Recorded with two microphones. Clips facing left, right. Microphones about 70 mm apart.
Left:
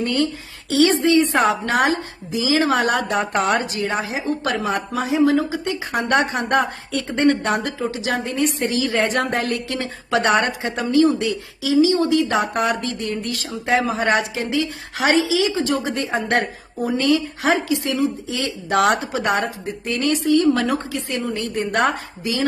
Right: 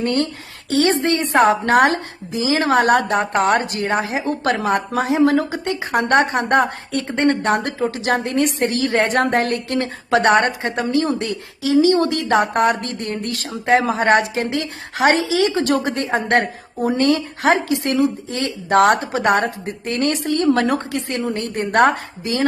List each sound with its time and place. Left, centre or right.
0.0 s a woman's voice: right
2.4 s a woman's voice: right